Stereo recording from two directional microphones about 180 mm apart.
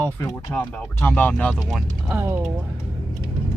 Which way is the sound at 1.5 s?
5° right (ahead or behind).